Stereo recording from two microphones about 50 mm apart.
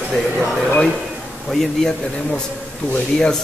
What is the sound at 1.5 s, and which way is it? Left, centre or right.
Speech, centre.